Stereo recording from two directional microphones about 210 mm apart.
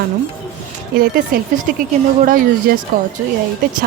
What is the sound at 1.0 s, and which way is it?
Speech, 45° right (ahead or behind).